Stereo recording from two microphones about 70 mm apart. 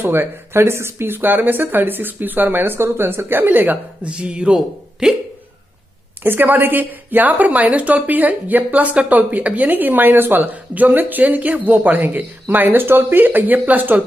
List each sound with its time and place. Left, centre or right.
0.0 s a woman's voice: right
4.1 s speech: centre
6.2 s a woman's voice: right